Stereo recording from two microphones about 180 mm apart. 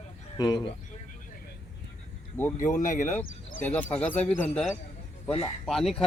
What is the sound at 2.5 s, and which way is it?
Speech, 45° left (ahead or behind).